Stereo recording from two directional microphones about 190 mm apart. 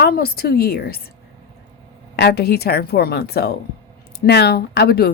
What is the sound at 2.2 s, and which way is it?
Speech, 60° left (ahead or behind).